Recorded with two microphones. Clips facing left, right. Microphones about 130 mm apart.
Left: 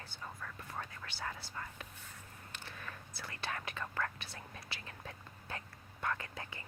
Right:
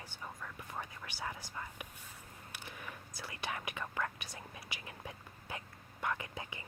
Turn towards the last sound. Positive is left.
turn(degrees=-15)  # may be behind; listen again after turning